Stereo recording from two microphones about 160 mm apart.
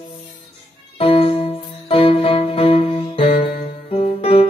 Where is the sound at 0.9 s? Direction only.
35° left (ahead or behind).